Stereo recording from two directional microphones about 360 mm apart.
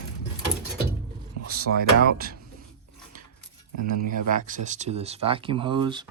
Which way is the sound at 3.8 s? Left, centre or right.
Right.